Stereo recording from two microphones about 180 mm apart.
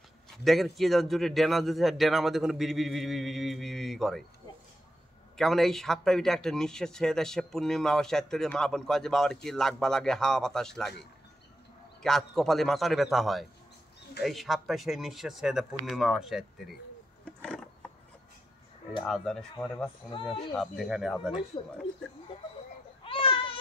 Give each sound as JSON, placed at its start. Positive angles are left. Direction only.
{"t": 0.4, "sound": "speech", "side_deg": 0}
{"t": 5.4, "sound": "speech", "side_deg": 0}
{"t": 12.0, "sound": "speech", "side_deg": 0}
{"t": 17.2, "sound": "a sound", "side_deg": 5}
{"t": 19.0, "sound": "speech", "side_deg": 0}
{"t": 20.5, "sound": "speech", "side_deg": 0}
{"t": 23.0, "sound": "a sound", "side_deg": 30}